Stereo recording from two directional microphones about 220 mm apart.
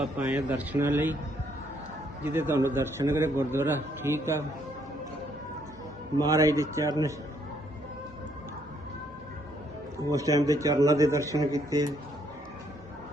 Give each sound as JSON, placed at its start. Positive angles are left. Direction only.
{"t": 0.0, "sound": "a man's voice", "side_deg": -5}
{"t": 2.2, "sound": "a man's voice", "side_deg": -10}
{"t": 6.2, "sound": "a man's voice", "side_deg": -15}
{"t": 10.1, "sound": "a man's voice", "side_deg": -15}